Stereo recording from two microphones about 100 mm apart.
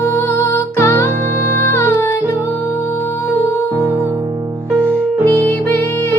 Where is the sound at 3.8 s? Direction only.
25° right (ahead or behind).